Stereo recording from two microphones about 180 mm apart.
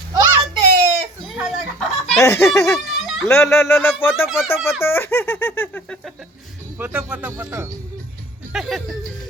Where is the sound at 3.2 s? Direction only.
15° left (ahead or behind).